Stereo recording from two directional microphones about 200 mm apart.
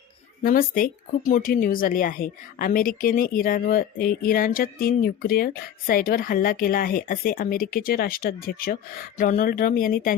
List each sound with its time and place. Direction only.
0.4 s speech: 45° left (ahead or behind)